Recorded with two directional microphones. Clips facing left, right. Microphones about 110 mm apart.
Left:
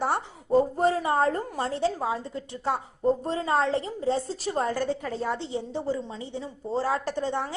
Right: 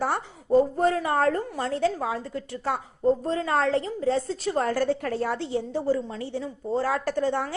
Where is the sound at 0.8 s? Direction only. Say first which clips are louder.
Even; 30° left (ahead or behind).